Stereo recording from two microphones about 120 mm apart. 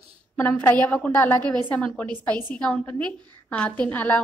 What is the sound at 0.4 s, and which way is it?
A woman's voice, 15° left (ahead or behind).